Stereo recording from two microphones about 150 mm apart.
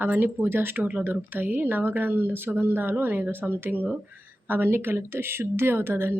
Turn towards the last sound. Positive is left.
turn(degrees=-15)  # may be behind; listen again after turning